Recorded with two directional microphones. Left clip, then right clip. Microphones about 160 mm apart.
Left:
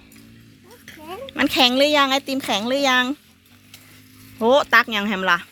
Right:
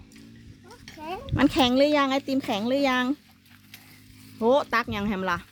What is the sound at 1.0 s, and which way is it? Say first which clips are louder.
Speech: left 2 dB; 30° right (ahead or behind).